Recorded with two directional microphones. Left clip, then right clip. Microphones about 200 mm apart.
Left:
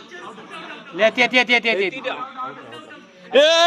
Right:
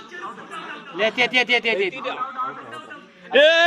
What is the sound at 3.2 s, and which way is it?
Speech, 20° left (ahead or behind).